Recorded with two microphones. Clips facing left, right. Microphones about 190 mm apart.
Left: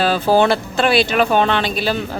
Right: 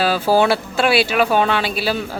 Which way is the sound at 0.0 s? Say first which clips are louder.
Left 1 dB; 5° right (ahead or behind).